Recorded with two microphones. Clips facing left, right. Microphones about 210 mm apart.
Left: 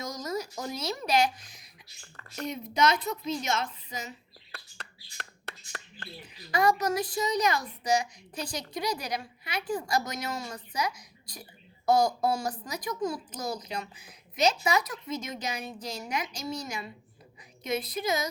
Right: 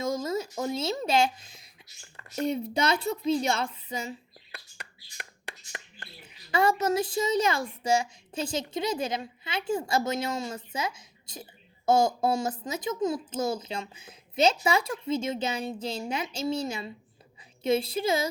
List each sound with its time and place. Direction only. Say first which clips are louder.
0.0 s a woman's voice: right 5 dB; 25° right (ahead or behind)
4.5 s a sound: even; 15° right (ahead or behind)
6.5 s a child's voice: right 1 dB; 25° right (ahead or behind)